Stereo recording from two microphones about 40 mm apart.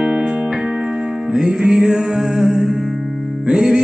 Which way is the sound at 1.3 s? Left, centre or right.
Centre.